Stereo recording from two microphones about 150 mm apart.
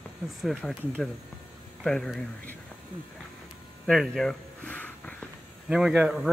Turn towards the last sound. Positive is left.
turn(degrees=-5)  # may be behind; listen again after turning